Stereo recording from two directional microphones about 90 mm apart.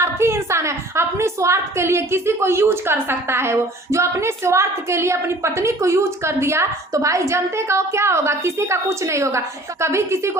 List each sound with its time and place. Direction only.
0.0 s a woman's voice: 30° right (ahead or behind)